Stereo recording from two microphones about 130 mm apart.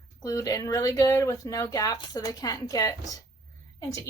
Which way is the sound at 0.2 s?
25° left (ahead or behind).